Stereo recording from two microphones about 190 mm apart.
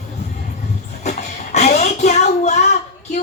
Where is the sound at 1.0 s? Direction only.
35° left (ahead or behind).